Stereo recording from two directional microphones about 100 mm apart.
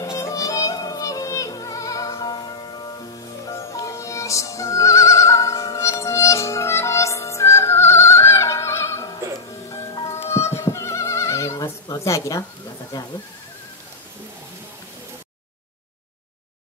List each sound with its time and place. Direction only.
0.0 s music: 35° left (ahead or behind)
11.9 s a woman's voice: 35° left (ahead or behind)